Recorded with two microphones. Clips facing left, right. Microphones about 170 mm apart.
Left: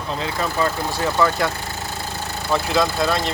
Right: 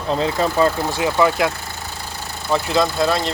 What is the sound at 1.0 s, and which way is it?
Speech, 10° right (ahead or behind).